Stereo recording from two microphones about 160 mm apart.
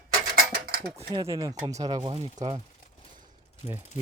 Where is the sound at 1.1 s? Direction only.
20° right (ahead or behind).